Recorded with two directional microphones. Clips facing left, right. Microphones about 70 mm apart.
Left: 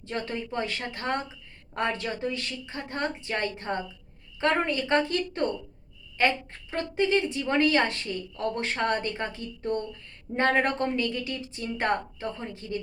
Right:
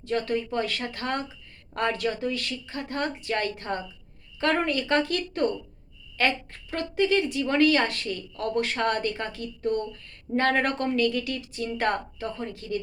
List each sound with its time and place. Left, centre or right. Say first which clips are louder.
0.0 s a woman's voice: right 5 dB; left